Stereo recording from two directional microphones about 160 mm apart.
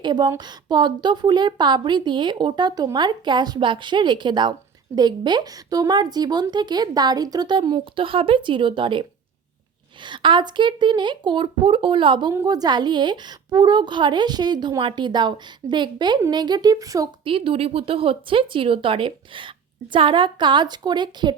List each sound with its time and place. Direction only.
0.0 s a woman's voice: 25° right (ahead or behind)
12.3 s a woman's voice: 20° right (ahead or behind)
17.2 s speech: 35° right (ahead or behind)